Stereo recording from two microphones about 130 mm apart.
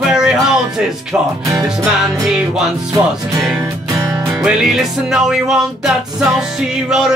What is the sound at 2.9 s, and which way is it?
Music, 25° right (ahead or behind).